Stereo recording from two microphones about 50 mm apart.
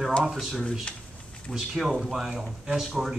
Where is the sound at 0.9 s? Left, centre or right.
Left.